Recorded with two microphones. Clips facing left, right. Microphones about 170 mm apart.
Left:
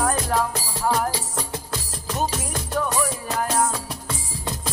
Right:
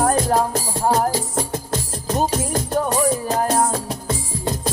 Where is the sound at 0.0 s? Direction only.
35° right (ahead or behind).